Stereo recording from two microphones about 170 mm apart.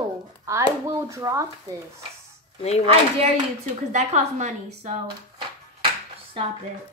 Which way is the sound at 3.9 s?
45° right (ahead or behind).